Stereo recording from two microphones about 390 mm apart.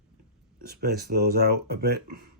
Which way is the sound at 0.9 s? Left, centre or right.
Right.